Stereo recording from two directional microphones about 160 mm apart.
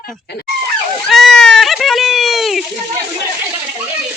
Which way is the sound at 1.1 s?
Centre (ahead or behind).